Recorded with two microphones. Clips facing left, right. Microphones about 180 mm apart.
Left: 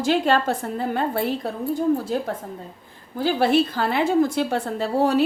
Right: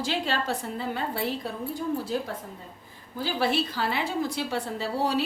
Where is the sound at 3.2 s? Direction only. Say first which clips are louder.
Left 8 dB; 50° left (ahead or behind).